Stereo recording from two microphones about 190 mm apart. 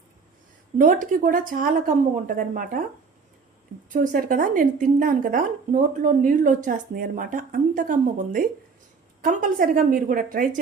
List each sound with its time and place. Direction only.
0.8 s speech: 45° right (ahead or behind)
3.8 s speech: 45° right (ahead or behind)